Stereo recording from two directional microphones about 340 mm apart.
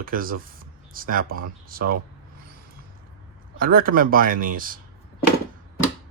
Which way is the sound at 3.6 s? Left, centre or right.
Right.